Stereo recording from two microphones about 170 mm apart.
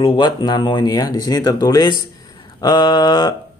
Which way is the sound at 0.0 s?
25° left (ahead or behind).